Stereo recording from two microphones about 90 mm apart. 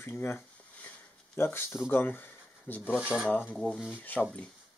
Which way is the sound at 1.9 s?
25° left (ahead or behind).